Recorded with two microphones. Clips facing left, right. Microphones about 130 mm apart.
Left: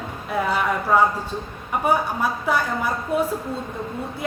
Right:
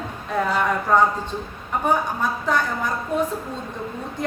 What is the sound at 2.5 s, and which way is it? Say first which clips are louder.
Speech: even; 10° left (ahead or behind).